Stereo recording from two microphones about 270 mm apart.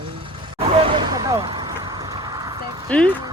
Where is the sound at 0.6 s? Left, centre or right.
Centre.